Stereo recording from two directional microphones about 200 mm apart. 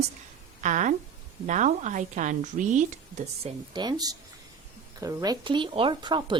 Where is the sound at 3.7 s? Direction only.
20° right (ahead or behind).